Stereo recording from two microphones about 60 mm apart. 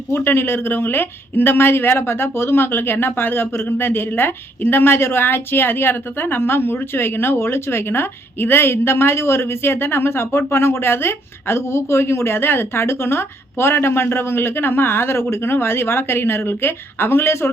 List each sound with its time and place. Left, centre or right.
0.1 s a woman's voice: left